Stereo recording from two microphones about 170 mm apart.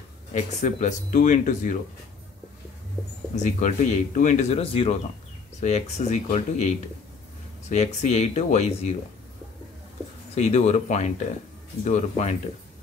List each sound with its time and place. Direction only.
0.3 s speech: 45° left (ahead or behind)
3.3 s speech: 45° left (ahead or behind)
7.7 s speech: 40° left (ahead or behind)
10.3 s speech: 40° left (ahead or behind)